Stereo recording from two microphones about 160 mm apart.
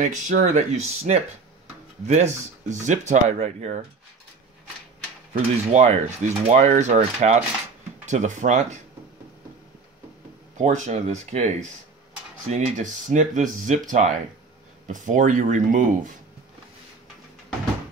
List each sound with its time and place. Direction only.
0.0 s speech: 50° right (ahead or behind)
5.4 s speech: 45° right (ahead or behind)
10.6 s speech: 45° right (ahead or behind)